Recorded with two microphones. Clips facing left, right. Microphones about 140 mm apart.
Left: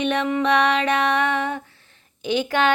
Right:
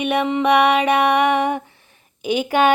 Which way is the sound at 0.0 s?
10° right (ahead or behind).